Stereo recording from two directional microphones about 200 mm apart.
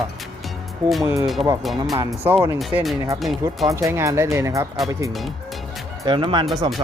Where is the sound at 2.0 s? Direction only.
15° right (ahead or behind).